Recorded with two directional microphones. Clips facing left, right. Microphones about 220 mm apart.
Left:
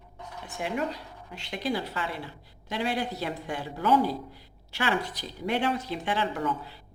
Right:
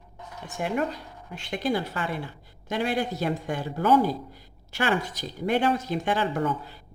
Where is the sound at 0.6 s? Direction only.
50° right (ahead or behind).